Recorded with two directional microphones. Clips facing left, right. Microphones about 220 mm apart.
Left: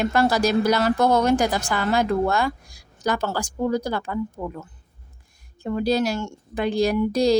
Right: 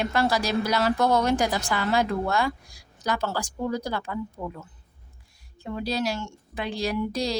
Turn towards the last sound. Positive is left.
turn(degrees=45)  # may be behind; listen again after turning